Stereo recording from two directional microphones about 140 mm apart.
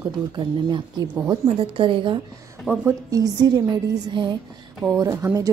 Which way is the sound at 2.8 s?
25° right (ahead or behind).